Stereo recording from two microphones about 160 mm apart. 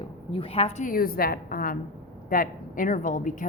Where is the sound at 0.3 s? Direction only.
40° left (ahead or behind).